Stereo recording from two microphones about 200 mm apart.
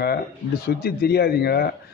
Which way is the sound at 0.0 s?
50° left (ahead or behind).